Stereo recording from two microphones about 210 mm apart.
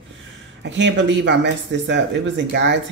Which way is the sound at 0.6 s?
60° right (ahead or behind).